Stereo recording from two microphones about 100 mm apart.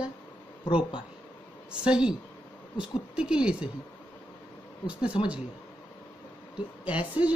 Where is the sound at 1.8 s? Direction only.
10° right (ahead or behind).